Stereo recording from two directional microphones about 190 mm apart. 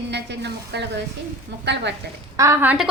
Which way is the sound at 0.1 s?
65° right (ahead or behind).